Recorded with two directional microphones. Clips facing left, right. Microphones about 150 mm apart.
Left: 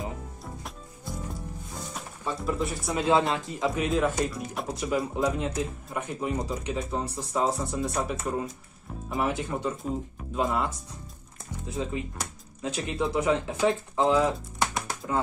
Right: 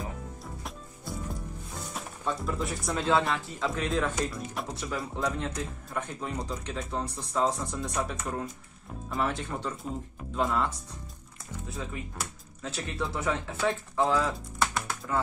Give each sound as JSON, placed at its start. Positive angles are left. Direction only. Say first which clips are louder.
{"t": 2.0, "sound": "speech", "louder": "right 1 dB", "side_deg": 0}
{"t": 2.9, "sound": "speech", "louder": "left 3 dB", "side_deg": 15}
{"t": 4.7, "sound": "speech", "louder": "left 10 dB", "side_deg": 15}
{"t": 11.7, "sound": "speech", "louder": "left 7 dB", "side_deg": 20}